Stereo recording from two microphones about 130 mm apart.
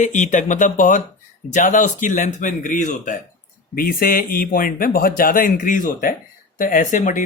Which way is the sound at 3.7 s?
90° left.